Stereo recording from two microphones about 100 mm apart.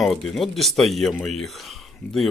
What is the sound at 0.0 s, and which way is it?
Speech, centre (ahead or behind).